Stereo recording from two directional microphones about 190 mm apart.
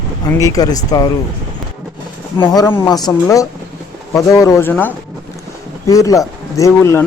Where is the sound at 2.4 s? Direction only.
15° left (ahead or behind).